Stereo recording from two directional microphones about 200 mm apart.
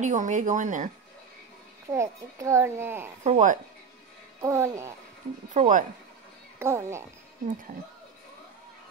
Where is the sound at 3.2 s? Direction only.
40° right (ahead or behind).